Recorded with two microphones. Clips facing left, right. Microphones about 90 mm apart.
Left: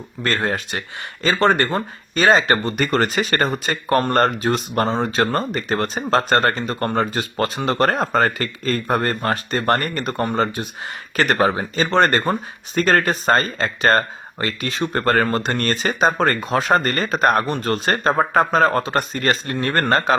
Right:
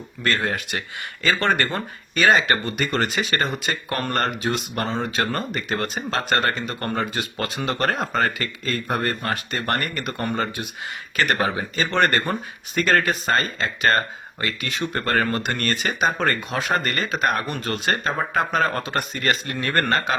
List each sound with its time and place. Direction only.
0.2 s speech: 35° left (ahead or behind)